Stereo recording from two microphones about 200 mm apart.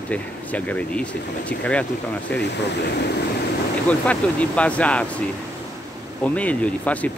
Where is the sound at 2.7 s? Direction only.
55° left (ahead or behind).